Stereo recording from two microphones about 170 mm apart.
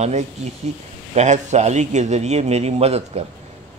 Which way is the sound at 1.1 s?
45° right (ahead or behind).